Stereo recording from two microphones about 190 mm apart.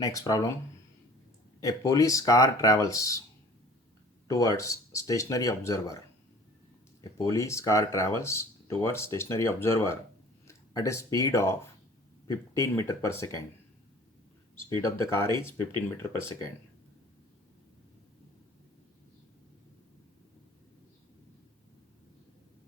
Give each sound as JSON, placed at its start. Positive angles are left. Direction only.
{"t": 0.0, "sound": "speech", "side_deg": 20}
{"t": 1.6, "sound": "speech", "side_deg": 15}
{"t": 4.3, "sound": "speech", "side_deg": 20}
{"t": 7.0, "sound": "speech", "side_deg": 20}
{"t": 14.7, "sound": "speech", "side_deg": 15}